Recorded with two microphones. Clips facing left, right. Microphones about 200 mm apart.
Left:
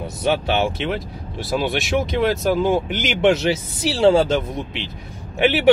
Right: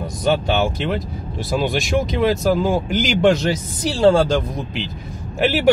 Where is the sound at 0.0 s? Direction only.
5° left (ahead or behind).